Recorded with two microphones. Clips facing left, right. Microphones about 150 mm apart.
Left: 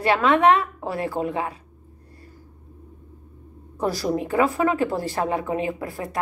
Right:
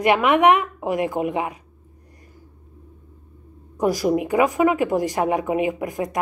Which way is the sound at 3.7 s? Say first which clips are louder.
Right 4 dB; 15° right (ahead or behind).